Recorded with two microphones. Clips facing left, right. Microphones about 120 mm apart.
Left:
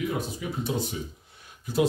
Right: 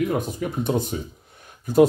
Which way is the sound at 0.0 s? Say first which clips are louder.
Right 6 dB; 50° right (ahead or behind).